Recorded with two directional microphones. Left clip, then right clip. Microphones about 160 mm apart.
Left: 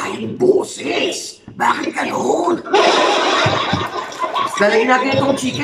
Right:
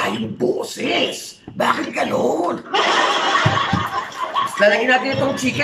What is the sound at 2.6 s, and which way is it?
Snicker, 30° left (ahead or behind).